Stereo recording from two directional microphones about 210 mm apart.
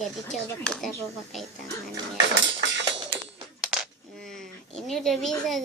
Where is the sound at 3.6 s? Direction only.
Centre (ahead or behind).